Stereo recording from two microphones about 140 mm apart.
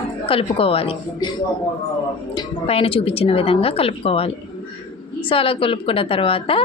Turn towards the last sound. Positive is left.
turn(degrees=40)  # may be behind; listen again after turning